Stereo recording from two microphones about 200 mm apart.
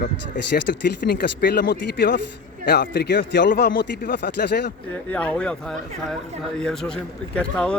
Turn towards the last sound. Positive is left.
turn(degrees=5)  # may be behind; listen again after turning